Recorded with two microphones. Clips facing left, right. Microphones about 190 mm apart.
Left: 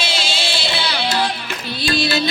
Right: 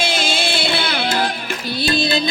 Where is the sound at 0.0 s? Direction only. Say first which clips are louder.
Right 4 dB; 50° right (ahead or behind).